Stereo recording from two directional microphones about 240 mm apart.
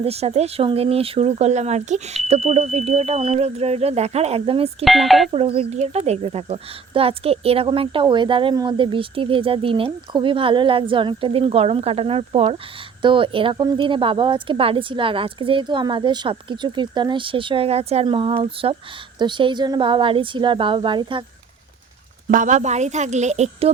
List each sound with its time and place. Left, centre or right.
0.0 s a woman's voice: right
4.9 s speech: centre
5.3 s a woman's voice: right
22.3 s a woman's voice: right